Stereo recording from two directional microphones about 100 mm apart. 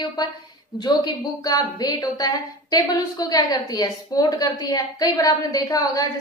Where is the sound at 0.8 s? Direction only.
40° left (ahead or behind).